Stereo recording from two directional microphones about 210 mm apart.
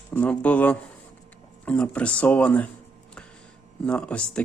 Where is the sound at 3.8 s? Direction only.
5° left (ahead or behind).